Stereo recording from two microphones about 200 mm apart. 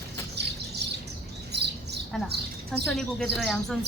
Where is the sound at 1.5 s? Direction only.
55° right (ahead or behind).